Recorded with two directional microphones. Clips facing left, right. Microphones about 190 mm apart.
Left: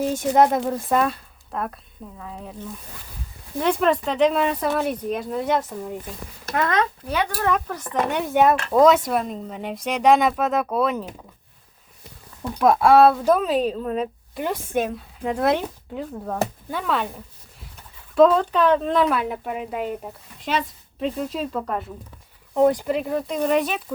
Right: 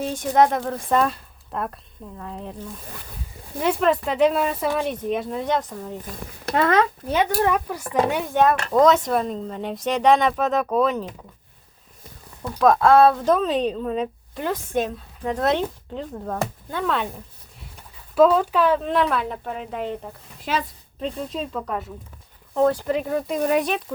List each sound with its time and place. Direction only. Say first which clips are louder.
0.1 s speech: right 1 dB; 10° left (ahead or behind)
3.6 s speech: even; centre (ahead or behind)
6.6 s speech: right 3 dB; 25° right (ahead or behind)
7.5 s speech: right 2 dB; 10° right (ahead or behind)
8.3 s speech: left 1 dB; 10° left (ahead or behind)
12.5 s speech: even; 10° left (ahead or behind)
18.1 s speech: left 1 dB; 5° right (ahead or behind)
20.5 s speech: left 1 dB; 5° right (ahead or behind)
22.5 s speech: left 1 dB; 15° left (ahead or behind)
23.0 s speech: even; centre (ahead or behind)